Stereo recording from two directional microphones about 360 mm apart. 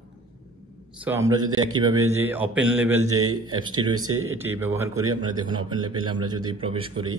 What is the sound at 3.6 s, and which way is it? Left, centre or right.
Speech, centre.